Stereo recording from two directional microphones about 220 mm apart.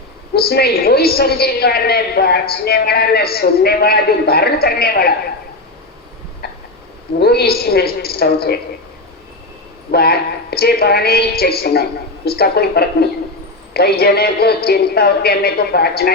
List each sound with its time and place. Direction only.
0.3 s a woman's voice: 45° left (ahead or behind)
7.2 s a woman's voice: 45° left (ahead or behind)
9.9 s a woman's voice: 45° left (ahead or behind)